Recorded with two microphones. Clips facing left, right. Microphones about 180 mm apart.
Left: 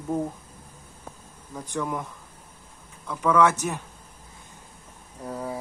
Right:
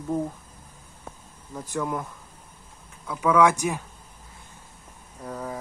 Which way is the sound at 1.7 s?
5° right (ahead or behind).